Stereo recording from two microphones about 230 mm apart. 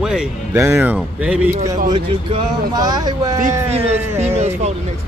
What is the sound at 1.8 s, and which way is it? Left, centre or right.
Speech, centre.